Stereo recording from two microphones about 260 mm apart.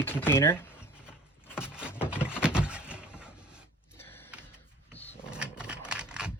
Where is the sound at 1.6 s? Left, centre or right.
Centre.